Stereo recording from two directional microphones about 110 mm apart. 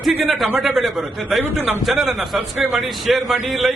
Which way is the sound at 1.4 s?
20° right (ahead or behind).